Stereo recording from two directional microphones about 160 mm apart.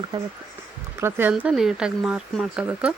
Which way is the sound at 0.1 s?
25° right (ahead or behind).